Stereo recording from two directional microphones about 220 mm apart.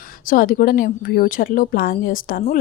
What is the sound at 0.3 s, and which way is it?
A woman's voice, 40° left (ahead or behind).